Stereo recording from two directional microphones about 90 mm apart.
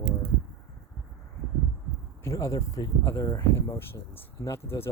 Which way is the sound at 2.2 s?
35° left (ahead or behind).